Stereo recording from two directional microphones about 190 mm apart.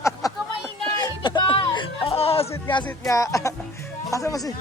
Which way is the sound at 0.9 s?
20° left (ahead or behind).